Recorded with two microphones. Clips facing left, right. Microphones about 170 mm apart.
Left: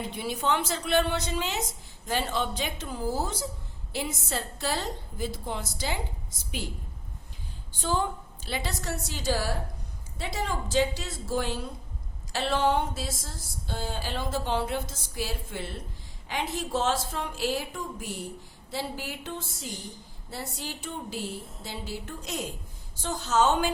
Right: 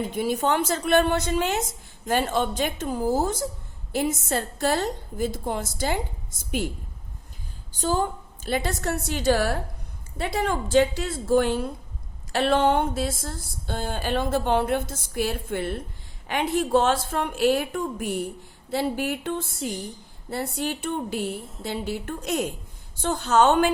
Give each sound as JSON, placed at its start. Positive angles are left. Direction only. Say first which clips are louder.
{"t": 0.1, "sound": "a woman's voice", "louder": "right 3 dB", "side_deg": -45}
{"t": 7.7, "sound": "a woman's voice", "louder": "right 4 dB", "side_deg": -40}